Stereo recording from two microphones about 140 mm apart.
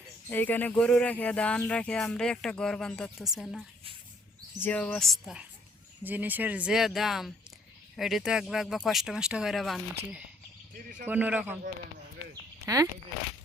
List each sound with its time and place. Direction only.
0.3 s speech: 15° left (ahead or behind)
4.6 s speech: 10° left (ahead or behind)
6.0 s speech: 10° right (ahead or behind)
10.8 s a man's voice: 85° right
11.0 s speech: 10° right (ahead or behind)
12.6 s speech: 25° right (ahead or behind)